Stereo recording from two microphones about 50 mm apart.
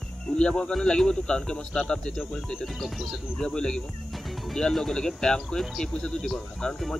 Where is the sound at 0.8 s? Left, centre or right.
Centre.